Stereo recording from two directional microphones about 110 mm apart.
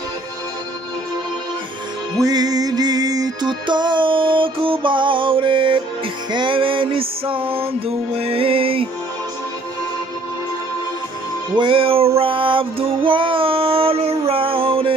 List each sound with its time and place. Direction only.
2.2 s music: 35° right (ahead or behind); by 8.8 s 55° right (ahead or behind)
11.5 s music: 50° right (ahead or behind)